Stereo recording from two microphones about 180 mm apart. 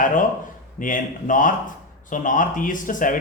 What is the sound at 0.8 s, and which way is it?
Speech, 50° left (ahead or behind).